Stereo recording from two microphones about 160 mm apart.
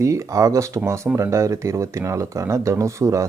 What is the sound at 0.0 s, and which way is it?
Speech, 20° right (ahead or behind).